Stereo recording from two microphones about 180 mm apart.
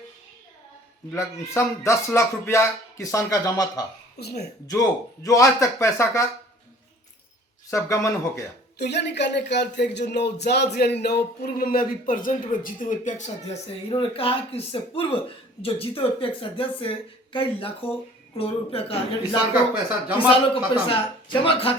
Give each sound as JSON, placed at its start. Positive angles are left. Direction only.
{"t": 1.1, "sound": "speech", "side_deg": 15}
{"t": 4.2, "sound": "speech", "side_deg": 60}
{"t": 4.6, "sound": "speech", "side_deg": 20}
{"t": 7.7, "sound": "speech", "side_deg": 15}
{"t": 8.8, "sound": "speech", "side_deg": 70}
{"t": 20.1, "sound": "speech", "side_deg": 30}